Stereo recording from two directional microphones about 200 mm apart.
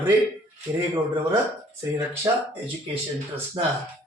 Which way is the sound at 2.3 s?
20° right (ahead or behind).